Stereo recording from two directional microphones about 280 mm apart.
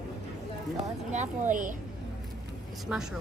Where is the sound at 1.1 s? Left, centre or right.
Right.